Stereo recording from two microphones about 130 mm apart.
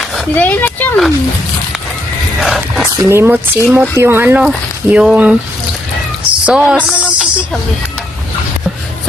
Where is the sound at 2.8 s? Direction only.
20° right (ahead or behind).